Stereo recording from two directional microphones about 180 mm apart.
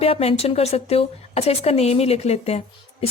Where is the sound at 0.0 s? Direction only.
35° left (ahead or behind).